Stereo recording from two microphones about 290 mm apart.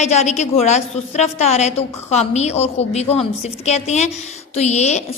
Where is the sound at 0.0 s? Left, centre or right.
Left.